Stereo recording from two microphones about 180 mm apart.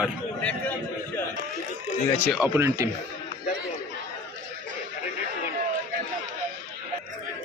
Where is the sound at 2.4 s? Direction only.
15° right (ahead or behind).